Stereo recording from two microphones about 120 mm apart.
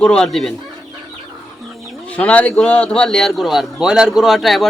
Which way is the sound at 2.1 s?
10° left (ahead or behind).